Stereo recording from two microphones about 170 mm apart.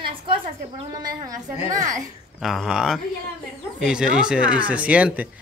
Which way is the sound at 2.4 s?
Centre (ahead or behind).